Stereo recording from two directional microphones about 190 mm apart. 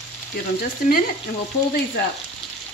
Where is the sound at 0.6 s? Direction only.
50° left (ahead or behind).